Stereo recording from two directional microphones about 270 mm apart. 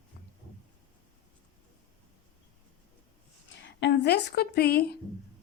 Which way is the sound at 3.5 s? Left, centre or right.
Left.